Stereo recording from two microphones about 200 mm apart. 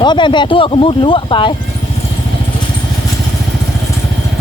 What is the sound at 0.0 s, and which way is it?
A man's voice, 20° left (ahead or behind).